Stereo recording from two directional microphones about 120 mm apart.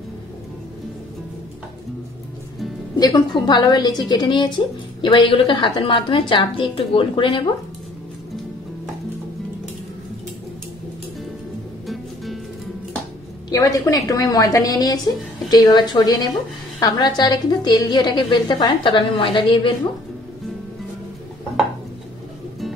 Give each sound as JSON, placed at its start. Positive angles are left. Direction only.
{"t": 3.0, "sound": "a woman's voice", "side_deg": 30}
{"t": 13.5, "sound": "a woman's voice", "side_deg": 30}